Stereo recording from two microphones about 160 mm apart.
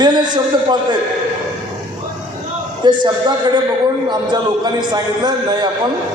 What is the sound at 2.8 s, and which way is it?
A man's voice, 30° right (ahead or behind).